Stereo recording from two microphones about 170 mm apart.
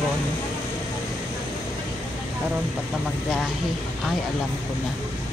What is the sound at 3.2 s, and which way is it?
Speech, 5° right (ahead or behind).